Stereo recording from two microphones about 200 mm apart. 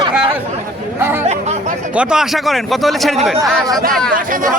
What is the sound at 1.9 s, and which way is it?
Speech, 5° right (ahead or behind).